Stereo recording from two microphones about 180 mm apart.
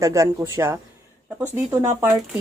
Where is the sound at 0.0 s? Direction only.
15° right (ahead or behind).